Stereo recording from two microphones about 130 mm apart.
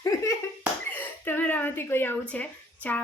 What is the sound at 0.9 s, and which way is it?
A woman's voice, 15° left (ahead or behind).